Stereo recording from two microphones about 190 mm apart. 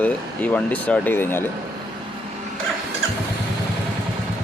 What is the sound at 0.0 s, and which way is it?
Speech, 5° left (ahead or behind).